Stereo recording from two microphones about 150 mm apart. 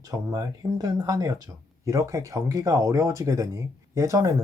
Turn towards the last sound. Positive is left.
turn(degrees=-20)  # may be behind; listen again after turning